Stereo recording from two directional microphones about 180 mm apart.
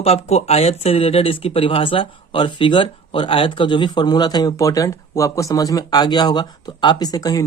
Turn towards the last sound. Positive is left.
turn(degrees=20)  # may be behind; listen again after turning